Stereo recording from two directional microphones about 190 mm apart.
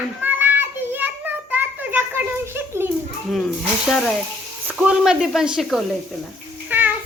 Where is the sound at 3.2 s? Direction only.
Centre (ahead or behind).